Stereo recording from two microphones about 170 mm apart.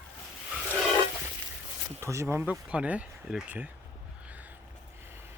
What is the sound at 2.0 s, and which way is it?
Speech, 15° right (ahead or behind).